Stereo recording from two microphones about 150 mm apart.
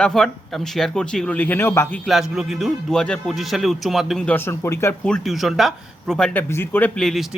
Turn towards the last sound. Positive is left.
turn(degrees=0)  # may be behind; listen again after turning